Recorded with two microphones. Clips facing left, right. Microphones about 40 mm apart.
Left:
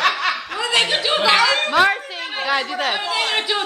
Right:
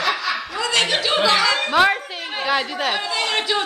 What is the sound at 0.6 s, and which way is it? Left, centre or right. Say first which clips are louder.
Speech: left 1 dB; centre.